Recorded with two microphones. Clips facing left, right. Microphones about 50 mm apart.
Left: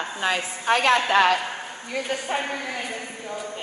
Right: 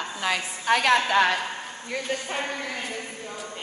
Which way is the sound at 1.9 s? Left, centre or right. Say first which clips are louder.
Left 3 dB; left.